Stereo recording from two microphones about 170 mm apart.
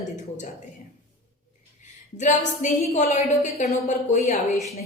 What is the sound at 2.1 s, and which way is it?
A woman's voice, 45° left (ahead or behind).